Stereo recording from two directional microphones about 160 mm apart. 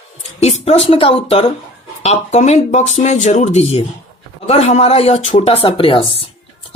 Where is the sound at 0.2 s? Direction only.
40° left (ahead or behind).